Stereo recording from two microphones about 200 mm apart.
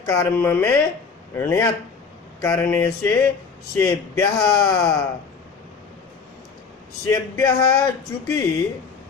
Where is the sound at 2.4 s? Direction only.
15° left (ahead or behind).